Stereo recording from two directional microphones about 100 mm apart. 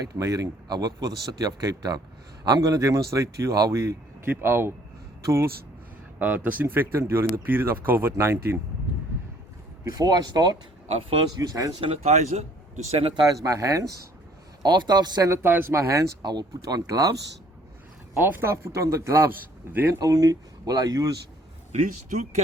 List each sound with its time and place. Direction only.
0.0 s speech: 35° right (ahead or behind)
6.1 s speech: 15° right (ahead or behind)
9.9 s speech: 40° right (ahead or behind)
11.8 s speech: 75° right (ahead or behind)
12.9 s speech: 75° right (ahead or behind)
13.2 s speech: 35° right (ahead or behind)
14.6 s a man's voice: 45° right (ahead or behind)
15.3 s speech: 20° right (ahead or behind)
16.2 s speech: 45° right (ahead or behind)
18.1 s speech: 25° right (ahead or behind)
20.0 s speech: 35° right (ahead or behind)